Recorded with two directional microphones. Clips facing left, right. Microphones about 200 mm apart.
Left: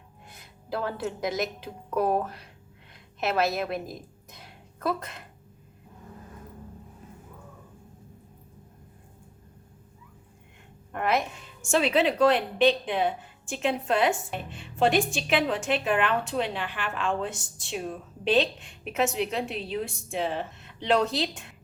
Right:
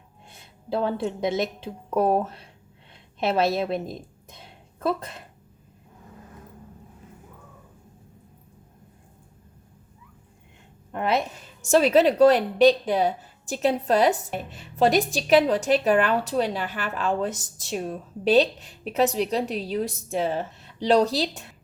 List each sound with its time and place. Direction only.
0.3 s a woman's voice: 30° right (ahead or behind)
2.9 s a sound: 30° right (ahead or behind)
10.9 s a woman's voice: 30° right (ahead or behind)